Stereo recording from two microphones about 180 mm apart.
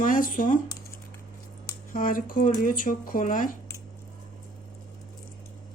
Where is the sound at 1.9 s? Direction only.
50° left (ahead or behind).